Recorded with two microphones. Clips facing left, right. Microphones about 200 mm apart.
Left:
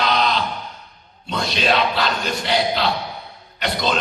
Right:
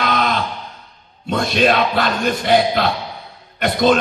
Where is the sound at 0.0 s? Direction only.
50° right (ahead or behind).